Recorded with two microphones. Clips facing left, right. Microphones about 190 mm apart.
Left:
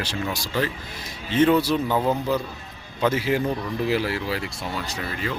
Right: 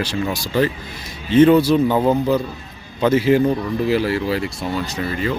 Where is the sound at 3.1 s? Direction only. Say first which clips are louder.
Right 8 dB; 5° left (ahead or behind).